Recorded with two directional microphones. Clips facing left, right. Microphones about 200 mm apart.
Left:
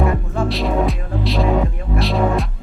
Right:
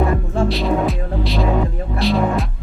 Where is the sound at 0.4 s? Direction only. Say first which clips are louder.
Even; centre (ahead or behind).